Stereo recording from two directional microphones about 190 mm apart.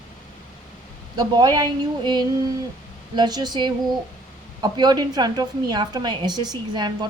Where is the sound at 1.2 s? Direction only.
20° right (ahead or behind).